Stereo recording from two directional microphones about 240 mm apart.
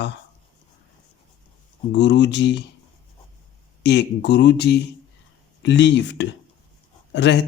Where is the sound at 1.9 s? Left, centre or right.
Left.